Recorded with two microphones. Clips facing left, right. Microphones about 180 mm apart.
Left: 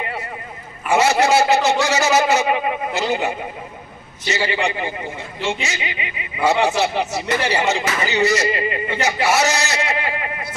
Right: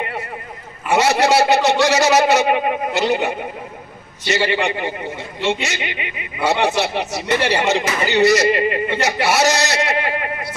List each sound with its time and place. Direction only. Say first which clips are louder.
0.8 s a man's voice: even; 70° right (ahead or behind)